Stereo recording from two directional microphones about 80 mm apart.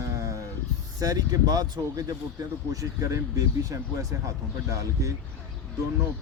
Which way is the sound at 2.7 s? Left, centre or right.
Right.